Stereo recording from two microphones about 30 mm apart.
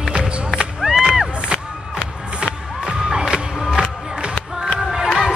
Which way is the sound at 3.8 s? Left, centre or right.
Right.